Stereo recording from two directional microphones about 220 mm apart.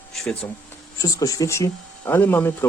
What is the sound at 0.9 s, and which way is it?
Speech, 15° left (ahead or behind).